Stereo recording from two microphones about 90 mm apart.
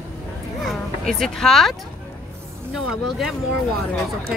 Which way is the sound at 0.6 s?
5° left (ahead or behind).